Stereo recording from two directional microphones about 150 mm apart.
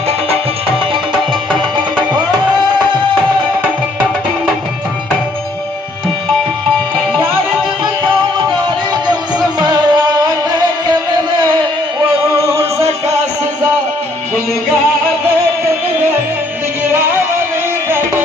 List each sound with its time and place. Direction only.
9.6 s music: 25° right (ahead or behind)